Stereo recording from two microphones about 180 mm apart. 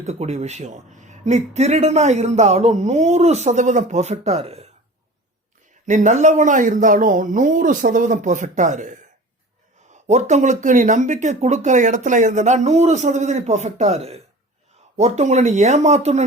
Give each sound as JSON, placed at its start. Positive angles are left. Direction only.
{"t": 0.0, "sound": "speech", "side_deg": -40}
{"t": 5.8, "sound": "speech", "side_deg": -40}